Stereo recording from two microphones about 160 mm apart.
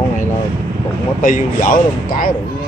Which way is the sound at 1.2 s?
55° left (ahead or behind).